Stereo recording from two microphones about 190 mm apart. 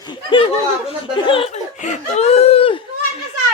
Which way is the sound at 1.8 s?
35° left (ahead or behind).